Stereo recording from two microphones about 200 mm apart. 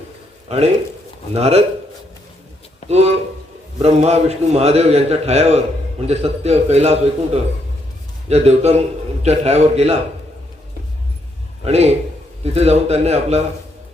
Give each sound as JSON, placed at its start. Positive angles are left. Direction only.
{"t": 0.4, "sound": "a man's voice", "side_deg": -30}
{"t": 2.9, "sound": "a man's voice", "side_deg": -30}
{"t": 8.3, "sound": "a man's voice", "side_deg": -30}
{"t": 11.6, "sound": "a man's voice", "side_deg": -30}